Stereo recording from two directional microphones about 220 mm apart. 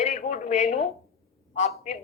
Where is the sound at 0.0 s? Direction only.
30° left (ahead or behind).